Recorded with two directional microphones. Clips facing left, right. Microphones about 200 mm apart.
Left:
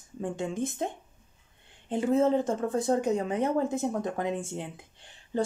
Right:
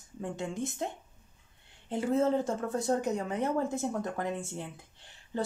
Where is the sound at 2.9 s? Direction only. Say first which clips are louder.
Left 4 dB; 20° left (ahead or behind).